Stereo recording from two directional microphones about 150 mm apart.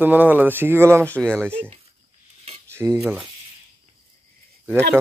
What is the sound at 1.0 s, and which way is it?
Speech, 10° left (ahead or behind).